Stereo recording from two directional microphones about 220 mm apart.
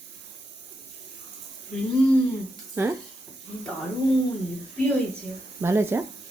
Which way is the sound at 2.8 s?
10° right (ahead or behind).